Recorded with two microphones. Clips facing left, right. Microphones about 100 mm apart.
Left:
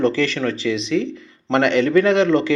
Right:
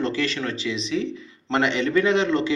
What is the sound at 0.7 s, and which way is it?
A man's voice, 65° left (ahead or behind).